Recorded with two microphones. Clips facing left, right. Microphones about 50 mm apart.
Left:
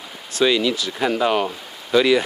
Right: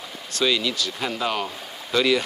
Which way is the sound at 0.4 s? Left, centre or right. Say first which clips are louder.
Left 5 dB; centre.